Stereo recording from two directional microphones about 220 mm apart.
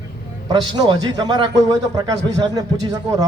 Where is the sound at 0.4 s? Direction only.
20° right (ahead or behind).